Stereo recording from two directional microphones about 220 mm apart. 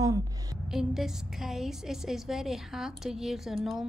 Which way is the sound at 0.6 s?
Centre (ahead or behind).